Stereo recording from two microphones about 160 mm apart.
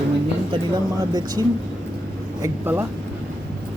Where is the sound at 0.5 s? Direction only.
25° right (ahead or behind).